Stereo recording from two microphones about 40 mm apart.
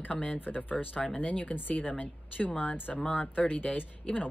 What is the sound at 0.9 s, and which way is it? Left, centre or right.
Speech, left.